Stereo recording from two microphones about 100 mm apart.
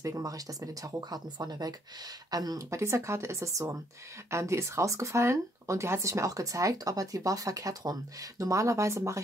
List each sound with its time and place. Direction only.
0.0 s speech: 35° right (ahead or behind)